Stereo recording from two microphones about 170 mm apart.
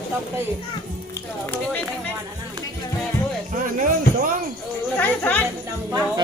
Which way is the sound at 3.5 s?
50° right (ahead or behind).